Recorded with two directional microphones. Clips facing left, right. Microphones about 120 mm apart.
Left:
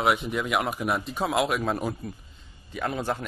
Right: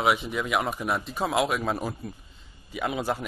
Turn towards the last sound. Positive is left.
turn(degrees=-5)  # may be behind; listen again after turning